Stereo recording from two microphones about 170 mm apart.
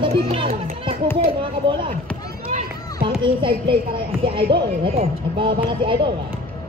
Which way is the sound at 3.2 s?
30° right (ahead or behind).